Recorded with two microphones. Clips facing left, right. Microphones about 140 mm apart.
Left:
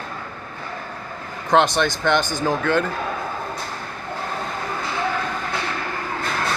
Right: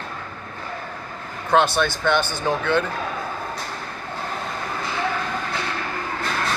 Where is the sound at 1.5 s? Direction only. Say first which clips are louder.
Left 1 dB; 15° left (ahead or behind).